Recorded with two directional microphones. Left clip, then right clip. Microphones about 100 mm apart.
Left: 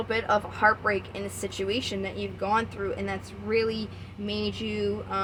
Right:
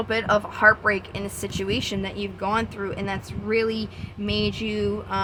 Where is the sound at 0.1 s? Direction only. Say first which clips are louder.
Right 3 dB; 45° right (ahead or behind).